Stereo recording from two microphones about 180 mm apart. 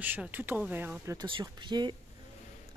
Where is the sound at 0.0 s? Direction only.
10° right (ahead or behind).